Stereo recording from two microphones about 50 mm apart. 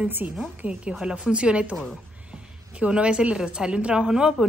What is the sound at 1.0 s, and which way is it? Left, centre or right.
A woman's voice, centre.